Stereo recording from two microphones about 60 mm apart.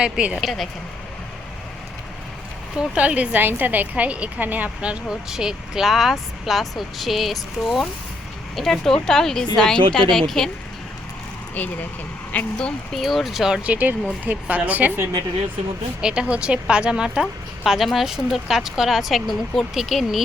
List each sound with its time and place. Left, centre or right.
0.0 s a woman's voice: centre
0.4 s speech: centre
2.7 s a woman's voice: centre
3.3 s a woman's voice: right
5.0 s speech: centre
8.5 s a woman's voice: centre
12.3 s a woman's voice: left
13.0 s speech: centre
13.6 s a woman's voice: right
16.0 s a woman's voice: centre